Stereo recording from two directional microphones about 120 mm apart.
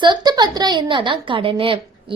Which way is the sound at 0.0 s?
40° right (ahead or behind).